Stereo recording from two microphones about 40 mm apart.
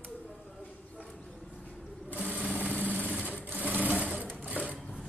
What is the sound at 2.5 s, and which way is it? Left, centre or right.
Vehicle, right.